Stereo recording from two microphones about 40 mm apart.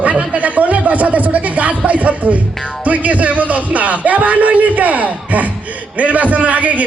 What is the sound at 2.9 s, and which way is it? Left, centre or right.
A man's voice, right.